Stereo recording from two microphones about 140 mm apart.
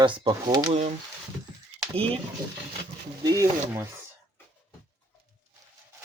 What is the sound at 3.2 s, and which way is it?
Speech, 25° right (ahead or behind).